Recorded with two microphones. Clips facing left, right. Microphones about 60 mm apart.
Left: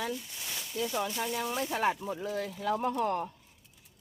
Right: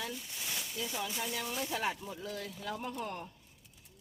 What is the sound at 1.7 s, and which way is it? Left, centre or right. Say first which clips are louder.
Speech: left 8 dB; left.